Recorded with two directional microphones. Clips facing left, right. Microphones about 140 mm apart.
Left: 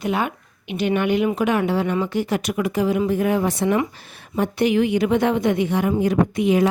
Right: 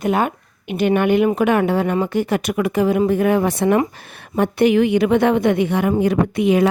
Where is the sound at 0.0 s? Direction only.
45° right (ahead or behind).